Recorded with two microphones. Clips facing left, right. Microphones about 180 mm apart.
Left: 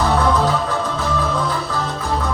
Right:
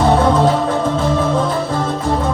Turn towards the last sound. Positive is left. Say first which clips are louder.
# right 5 dB
turn(degrees=-25)  # may be behind; listen again after turning